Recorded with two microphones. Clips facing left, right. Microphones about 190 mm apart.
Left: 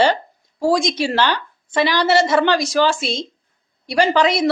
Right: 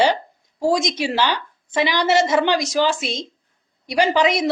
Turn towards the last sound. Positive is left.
turn(degrees=-15)  # may be behind; listen again after turning